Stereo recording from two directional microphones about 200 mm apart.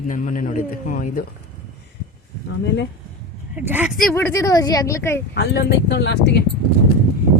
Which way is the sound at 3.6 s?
10° right (ahead or behind).